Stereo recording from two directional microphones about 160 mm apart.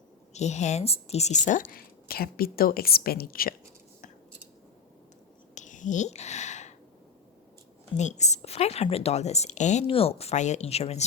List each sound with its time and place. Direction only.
0.3 s a woman's voice: 45° left (ahead or behind); by 3.5 s 70° left (ahead or behind)
5.5 s whispering: 50° left (ahead or behind)
7.9 s a woman's voice: 45° left (ahead or behind)